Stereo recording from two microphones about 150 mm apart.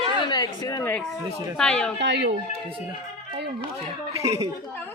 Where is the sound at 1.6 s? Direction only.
5° left (ahead or behind).